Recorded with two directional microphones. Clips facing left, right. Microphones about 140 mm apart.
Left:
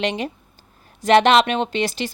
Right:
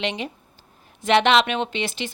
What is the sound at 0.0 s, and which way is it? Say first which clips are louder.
Speech: left 4 dB; 45° left (ahead or behind).